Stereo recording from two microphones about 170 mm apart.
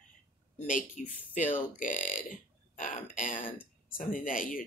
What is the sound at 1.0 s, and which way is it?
Speech, 50° left (ahead or behind).